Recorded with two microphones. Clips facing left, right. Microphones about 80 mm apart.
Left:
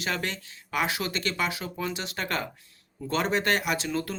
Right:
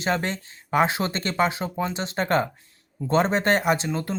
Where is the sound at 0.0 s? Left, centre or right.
Right.